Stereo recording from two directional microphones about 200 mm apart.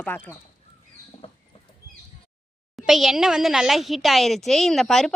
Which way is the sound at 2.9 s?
Centre (ahead or behind).